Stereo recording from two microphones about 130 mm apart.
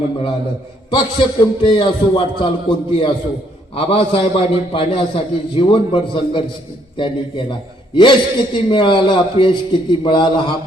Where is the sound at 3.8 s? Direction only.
50° left (ahead or behind).